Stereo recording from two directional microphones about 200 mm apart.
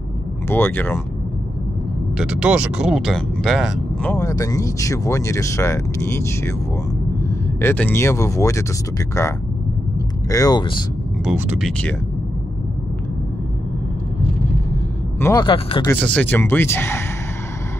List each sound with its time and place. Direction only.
0.5 s speech: 10° left (ahead or behind)
2.1 s speech: 5° right (ahead or behind)
4.1 s speech: 15° left (ahead or behind)
9.9 s speech: 15° left (ahead or behind)
11.2 s speech: 5° right (ahead or behind)
15.1 s speech: 10° left (ahead or behind)
15.4 s speech: 25° left (ahead or behind)
15.9 s speech: 5° left (ahead or behind)